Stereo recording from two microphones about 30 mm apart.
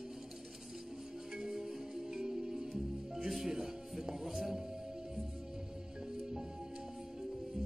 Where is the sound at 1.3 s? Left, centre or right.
Right.